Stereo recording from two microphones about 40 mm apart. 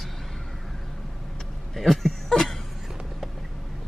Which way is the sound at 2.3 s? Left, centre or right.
Centre.